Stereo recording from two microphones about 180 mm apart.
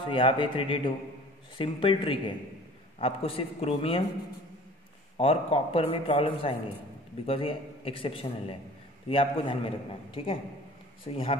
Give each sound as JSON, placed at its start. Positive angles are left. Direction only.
{"t": 0.1, "sound": "a man's voice", "side_deg": 30}
{"t": 5.1, "sound": "a man's voice", "side_deg": 30}